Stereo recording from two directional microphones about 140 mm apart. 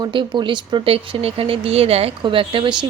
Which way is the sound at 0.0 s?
35° right (ahead or behind).